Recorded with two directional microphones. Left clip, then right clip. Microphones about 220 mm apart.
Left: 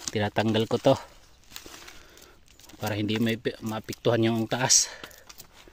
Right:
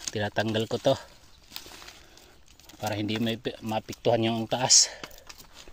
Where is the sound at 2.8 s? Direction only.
35° left (ahead or behind).